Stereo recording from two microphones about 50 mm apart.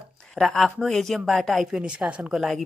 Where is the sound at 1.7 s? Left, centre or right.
Centre.